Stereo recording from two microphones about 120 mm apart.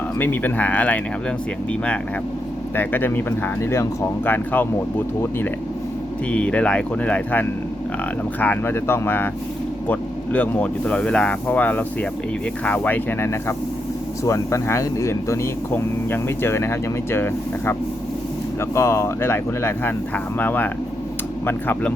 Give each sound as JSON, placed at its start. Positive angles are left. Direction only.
{"t": 0.2, "sound": "speech", "side_deg": 15}
{"t": 2.7, "sound": "speech", "side_deg": 15}